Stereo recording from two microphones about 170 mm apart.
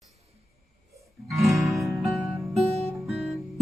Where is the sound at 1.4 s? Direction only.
Centre (ahead or behind).